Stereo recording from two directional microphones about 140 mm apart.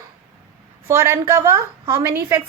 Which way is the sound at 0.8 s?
20° right (ahead or behind).